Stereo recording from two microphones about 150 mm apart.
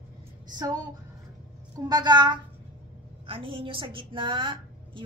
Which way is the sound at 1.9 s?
30° right (ahead or behind).